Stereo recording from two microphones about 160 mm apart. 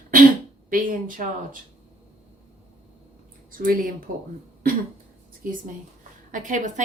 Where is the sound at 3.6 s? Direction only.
60° right (ahead or behind).